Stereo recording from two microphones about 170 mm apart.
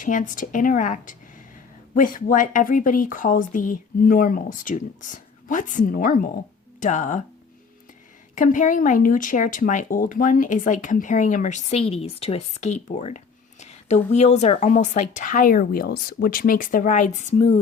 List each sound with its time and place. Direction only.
0.0 s speech: 50° left (ahead or behind)
8.4 s speech: 50° left (ahead or behind)